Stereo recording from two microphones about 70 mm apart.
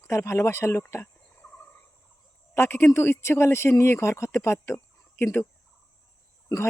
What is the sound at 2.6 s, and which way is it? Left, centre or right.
Speech, left.